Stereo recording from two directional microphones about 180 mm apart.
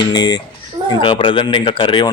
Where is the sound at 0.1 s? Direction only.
25° left (ahead or behind).